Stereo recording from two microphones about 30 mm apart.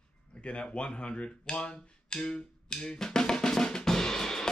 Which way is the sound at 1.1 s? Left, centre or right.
Left.